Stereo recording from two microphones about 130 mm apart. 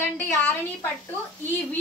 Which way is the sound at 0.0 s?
15° left (ahead or behind).